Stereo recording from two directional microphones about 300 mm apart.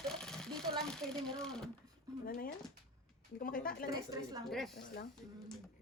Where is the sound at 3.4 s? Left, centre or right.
Left.